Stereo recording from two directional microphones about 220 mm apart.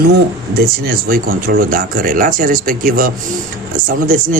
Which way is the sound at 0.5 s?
45° right (ahead or behind).